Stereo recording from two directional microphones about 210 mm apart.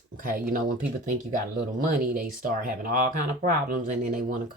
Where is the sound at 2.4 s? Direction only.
40° right (ahead or behind).